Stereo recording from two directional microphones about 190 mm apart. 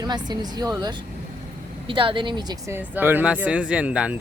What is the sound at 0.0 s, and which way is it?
Speech, 20° right (ahead or behind).